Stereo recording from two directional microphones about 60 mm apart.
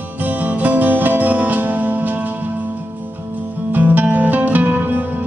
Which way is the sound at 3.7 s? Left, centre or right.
Right.